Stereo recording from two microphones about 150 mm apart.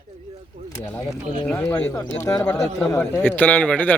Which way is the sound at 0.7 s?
20° left (ahead or behind).